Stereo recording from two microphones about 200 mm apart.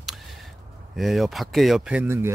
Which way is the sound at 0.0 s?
Centre (ahead or behind).